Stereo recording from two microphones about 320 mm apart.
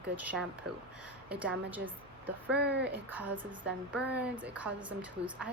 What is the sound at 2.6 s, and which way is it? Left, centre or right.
Speech, right.